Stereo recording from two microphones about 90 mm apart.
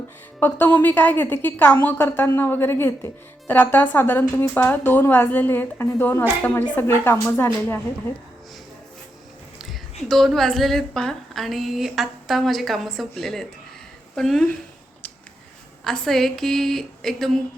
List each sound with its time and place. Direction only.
0.3 s a woman's voice: 20° left (ahead or behind)
9.6 s a woman's voice: centre (ahead or behind)
15.8 s a woman's voice: 5° left (ahead or behind)